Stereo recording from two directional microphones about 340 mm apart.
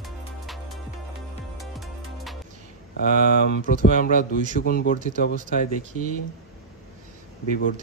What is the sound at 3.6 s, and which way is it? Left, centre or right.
Speech, left.